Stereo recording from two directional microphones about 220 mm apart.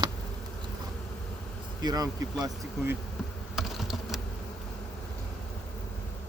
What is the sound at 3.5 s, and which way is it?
Insect, centre (ahead or behind).